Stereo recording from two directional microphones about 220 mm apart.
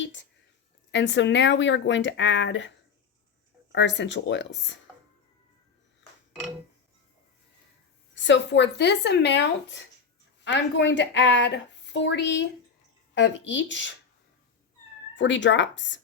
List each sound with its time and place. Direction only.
0.0 s a woman's voice: 55° left (ahead or behind)
8.1 s a woman's voice: 55° left (ahead or behind)
15.1 s speech: 55° left (ahead or behind)